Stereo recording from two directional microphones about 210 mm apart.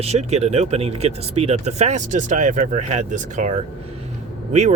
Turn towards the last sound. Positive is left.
turn(degrees=-35)  # may be behind; listen again after turning